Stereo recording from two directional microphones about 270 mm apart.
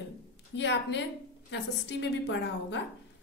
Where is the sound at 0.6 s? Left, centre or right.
Left.